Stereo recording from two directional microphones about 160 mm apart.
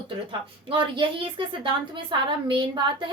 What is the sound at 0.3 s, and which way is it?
A woman's voice, 35° right (ahead or behind).